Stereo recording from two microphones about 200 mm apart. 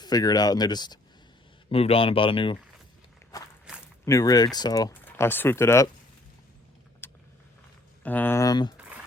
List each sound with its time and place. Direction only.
0.0 s speech: 20° left (ahead or behind)
4.0 s speech: 15° left (ahead or behind)
7.0 s vehicle: 10° left (ahead or behind)
8.0 s speech: 10° left (ahead or behind)